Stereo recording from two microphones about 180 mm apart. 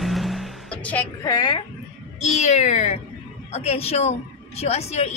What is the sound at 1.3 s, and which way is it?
Speech, 25° left (ahead or behind).